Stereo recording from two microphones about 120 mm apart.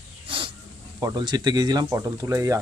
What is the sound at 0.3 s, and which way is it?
Dog, 45° right (ahead or behind).